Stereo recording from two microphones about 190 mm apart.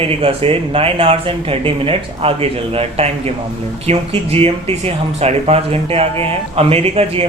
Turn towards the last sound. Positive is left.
turn(degrees=-30)  # may be behind; listen again after turning